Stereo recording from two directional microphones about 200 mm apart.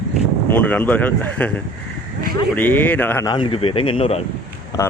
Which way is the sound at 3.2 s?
25° left (ahead or behind).